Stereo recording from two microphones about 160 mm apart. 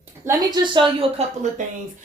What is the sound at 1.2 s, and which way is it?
Speech, 40° right (ahead or behind).